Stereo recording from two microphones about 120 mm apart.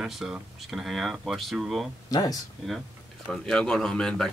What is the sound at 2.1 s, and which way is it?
Speech, 30° left (ahead or behind).